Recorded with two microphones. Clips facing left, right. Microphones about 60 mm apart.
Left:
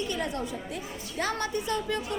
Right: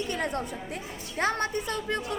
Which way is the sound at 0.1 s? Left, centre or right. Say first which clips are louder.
Right 1 dB; right.